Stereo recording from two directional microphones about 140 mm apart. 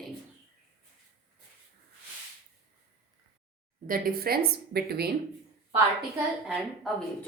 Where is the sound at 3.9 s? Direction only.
90° right.